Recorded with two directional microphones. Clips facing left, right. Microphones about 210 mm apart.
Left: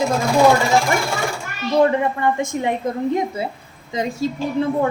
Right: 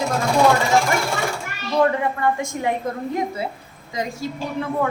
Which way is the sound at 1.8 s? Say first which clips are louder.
Left 2 dB; 20° left (ahead or behind).